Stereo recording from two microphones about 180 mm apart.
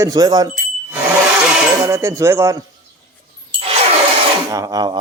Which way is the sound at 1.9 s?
15° right (ahead or behind).